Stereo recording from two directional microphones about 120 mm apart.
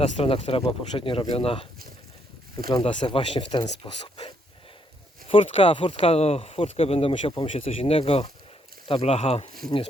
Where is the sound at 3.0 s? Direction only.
40° left (ahead or behind).